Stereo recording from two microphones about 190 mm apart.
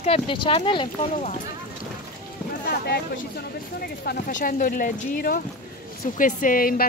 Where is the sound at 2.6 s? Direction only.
55° left (ahead or behind).